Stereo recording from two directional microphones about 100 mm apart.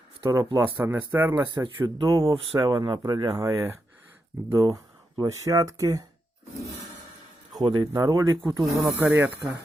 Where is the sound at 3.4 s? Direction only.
30° right (ahead or behind).